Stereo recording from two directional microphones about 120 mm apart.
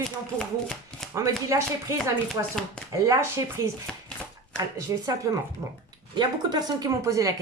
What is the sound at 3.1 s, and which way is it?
Speech, 25° right (ahead or behind).